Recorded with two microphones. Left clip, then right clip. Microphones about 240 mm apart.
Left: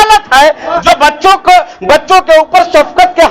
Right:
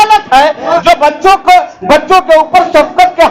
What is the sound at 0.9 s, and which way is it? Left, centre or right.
A man's voice, left.